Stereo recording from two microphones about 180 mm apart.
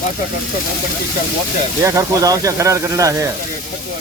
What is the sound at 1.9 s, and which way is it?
Speech, 15° right (ahead or behind).